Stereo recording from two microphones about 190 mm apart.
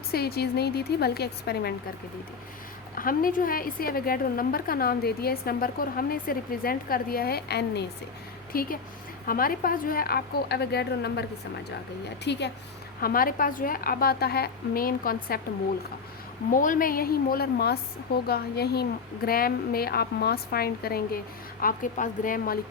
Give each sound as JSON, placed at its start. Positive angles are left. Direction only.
{"t": 0.1, "sound": "a woman's voice", "side_deg": 55}
{"t": 2.9, "sound": "a woman's voice", "side_deg": 45}
{"t": 8.5, "sound": "a woman's voice", "side_deg": 50}
{"t": 13.0, "sound": "a woman's voice", "side_deg": 50}
{"t": 16.5, "sound": "a woman's voice", "side_deg": 45}